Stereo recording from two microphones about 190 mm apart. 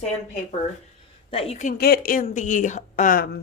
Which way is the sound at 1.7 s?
55° left (ahead or behind).